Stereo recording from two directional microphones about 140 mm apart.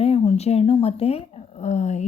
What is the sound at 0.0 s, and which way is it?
Speech, 45° left (ahead or behind).